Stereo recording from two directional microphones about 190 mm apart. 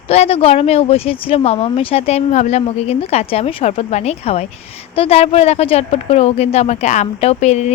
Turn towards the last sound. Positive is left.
turn(degrees=35)  # may be behind; listen again after turning